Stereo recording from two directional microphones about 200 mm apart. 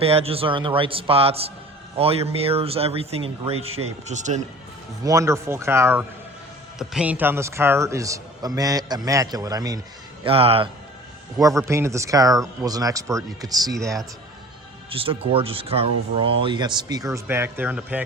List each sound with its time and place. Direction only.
0.0 s a man's voice: 30° right (ahead or behind)
5.0 s a man's voice: 15° right (ahead or behind)
10.2 s speech: 30° right (ahead or behind)
11.3 s a man's voice: 15° right (ahead or behind)
14.8 s speech: 25° right (ahead or behind); by 18.0 s 10° right (ahead or behind)